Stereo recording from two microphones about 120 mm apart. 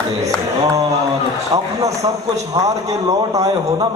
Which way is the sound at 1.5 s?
25° right (ahead or behind).